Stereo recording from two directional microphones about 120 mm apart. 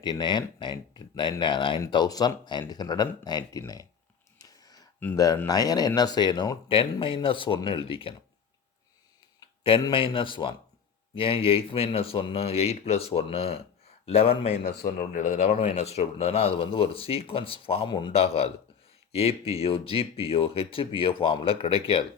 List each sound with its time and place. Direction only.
0.0 s speech: 40° left (ahead or behind)
4.4 s a sound: 30° left (ahead or behind)
5.1 s speech: 30° left (ahead or behind); by 8.1 s 50° left (ahead or behind)
9.9 s speech: 45° left (ahead or behind)
15.1 s speech: 90° left; by 17.8 s 50° left (ahead or behind)
17.8 s speech: 40° left (ahead or behind)
18.1 s speech: 55° left (ahead or behind)